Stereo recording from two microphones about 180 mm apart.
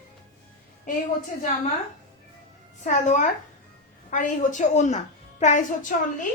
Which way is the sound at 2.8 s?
45° left (ahead or behind).